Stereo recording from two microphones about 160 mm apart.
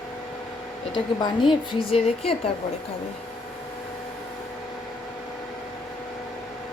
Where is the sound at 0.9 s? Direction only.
30° left (ahead or behind).